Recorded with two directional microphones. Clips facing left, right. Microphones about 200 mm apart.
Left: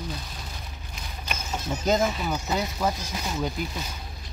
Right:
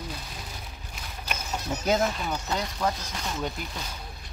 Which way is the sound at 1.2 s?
Centre (ahead or behind).